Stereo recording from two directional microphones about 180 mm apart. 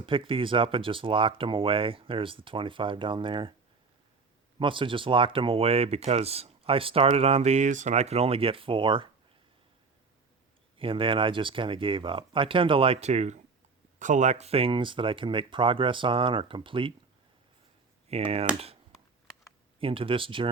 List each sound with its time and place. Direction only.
0.0 s speech: 30° right (ahead or behind)
4.6 s speech: 30° right (ahead or behind)
10.8 s speech: 30° right (ahead or behind)
18.1 s speech: 35° right (ahead or behind)
19.8 s speech: 30° right (ahead or behind)